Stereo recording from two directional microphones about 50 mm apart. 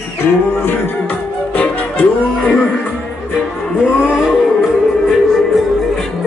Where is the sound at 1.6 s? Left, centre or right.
Left.